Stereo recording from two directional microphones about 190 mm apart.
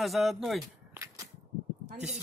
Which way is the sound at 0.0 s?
Centre (ahead or behind).